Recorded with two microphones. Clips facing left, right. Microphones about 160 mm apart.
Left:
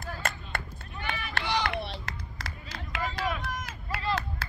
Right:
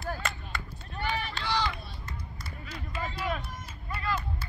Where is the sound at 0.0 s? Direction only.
50° left (ahead or behind).